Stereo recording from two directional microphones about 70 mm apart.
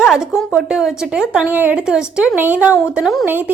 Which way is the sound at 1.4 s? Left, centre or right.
Right.